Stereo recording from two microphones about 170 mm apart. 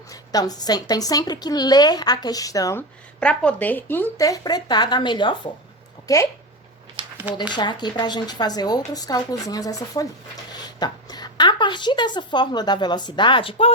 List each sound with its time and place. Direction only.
0.1 s speech: 20° left (ahead or behind)
3.2 s speech: 5° left (ahead or behind)
7.5 s speech: 25° left (ahead or behind)